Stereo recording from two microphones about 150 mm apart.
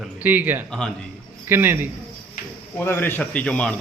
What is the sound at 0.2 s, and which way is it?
A man's voice, 10° right (ahead or behind).